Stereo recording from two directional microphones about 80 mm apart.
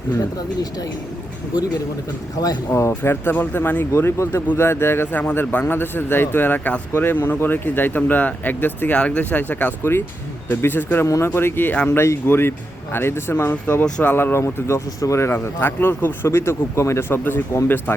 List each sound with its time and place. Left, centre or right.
2.3 s speech: left
3.0 s a man's voice: left
11.0 s a man's voice: left